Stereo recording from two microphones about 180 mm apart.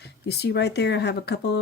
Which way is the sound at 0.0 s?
65° left (ahead or behind).